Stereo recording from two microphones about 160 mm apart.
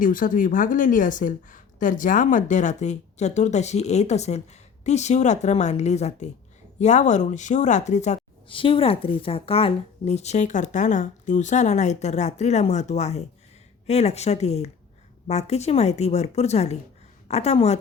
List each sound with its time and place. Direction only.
0.0 s a woman's voice: 60° left (ahead or behind)
8.4 s a woman's voice: 35° left (ahead or behind)